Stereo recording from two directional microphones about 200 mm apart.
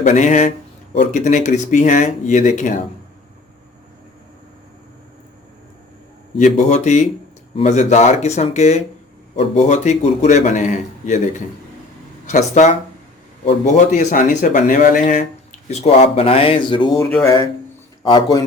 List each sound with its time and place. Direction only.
0.0 s speech: 35° left (ahead or behind)
6.4 s speech: 35° left (ahead or behind)